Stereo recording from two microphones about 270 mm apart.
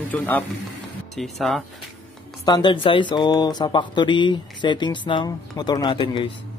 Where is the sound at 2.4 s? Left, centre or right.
Centre.